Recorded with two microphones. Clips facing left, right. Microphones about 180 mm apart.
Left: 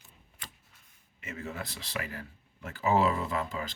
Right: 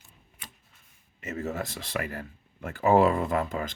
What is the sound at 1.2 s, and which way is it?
Speech, 40° right (ahead or behind).